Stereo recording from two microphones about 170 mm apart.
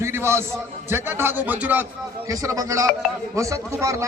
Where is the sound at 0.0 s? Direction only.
15° right (ahead or behind).